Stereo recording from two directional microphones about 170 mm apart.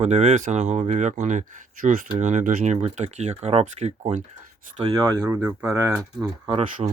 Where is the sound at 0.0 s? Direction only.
40° right (ahead or behind).